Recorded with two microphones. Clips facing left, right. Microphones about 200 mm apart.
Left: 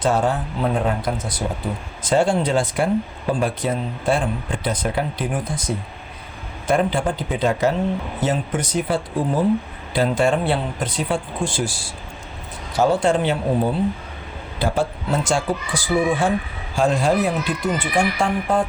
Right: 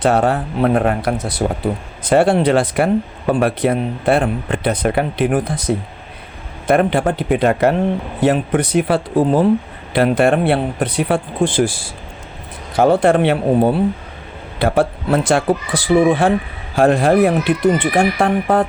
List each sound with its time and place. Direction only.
0.0 s speech: 65° right (ahead or behind)
12.7 s speech: 55° right (ahead or behind)